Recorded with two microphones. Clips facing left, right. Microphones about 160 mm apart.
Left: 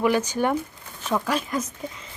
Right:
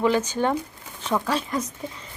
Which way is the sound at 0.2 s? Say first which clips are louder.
Even; 10° left (ahead or behind).